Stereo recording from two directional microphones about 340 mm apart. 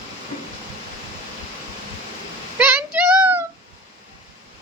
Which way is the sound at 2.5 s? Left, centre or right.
Centre.